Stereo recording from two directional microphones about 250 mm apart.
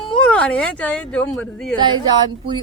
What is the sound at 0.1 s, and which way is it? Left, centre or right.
Speech, centre.